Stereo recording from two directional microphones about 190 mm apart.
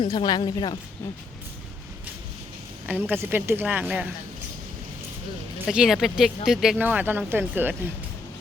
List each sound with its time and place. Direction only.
0.0 s a woman's voice: 25° left (ahead or behind)
2.8 s speech: 10° right (ahead or behind)
5.6 s speech: 5° right (ahead or behind)